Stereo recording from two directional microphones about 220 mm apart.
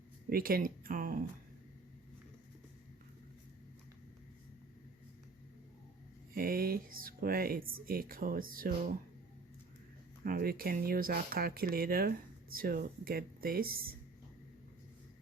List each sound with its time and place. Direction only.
0.3 s a sound: 40° right (ahead or behind)
6.3 s speech: 40° right (ahead or behind)
10.2 s speech: 45° right (ahead or behind)